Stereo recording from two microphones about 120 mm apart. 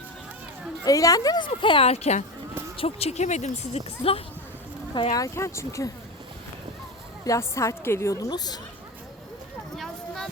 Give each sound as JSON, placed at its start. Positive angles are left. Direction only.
{"t": 0.9, "sound": "a woman's voice", "side_deg": 30}
{"t": 1.5, "sound": "speech", "side_deg": 50}
{"t": 5.1, "sound": "a woman's voice", "side_deg": 25}
{"t": 7.3, "sound": "a woman's voice", "side_deg": 25}
{"t": 9.7, "sound": "a sound", "side_deg": 0}